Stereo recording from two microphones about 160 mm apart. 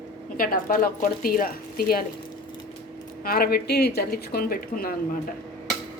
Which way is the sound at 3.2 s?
70° left (ahead or behind).